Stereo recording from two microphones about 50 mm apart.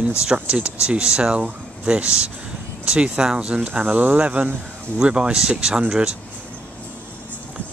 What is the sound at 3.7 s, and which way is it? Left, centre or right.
Speech, right.